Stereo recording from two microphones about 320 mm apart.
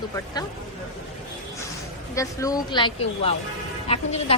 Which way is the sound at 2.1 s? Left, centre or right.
Centre.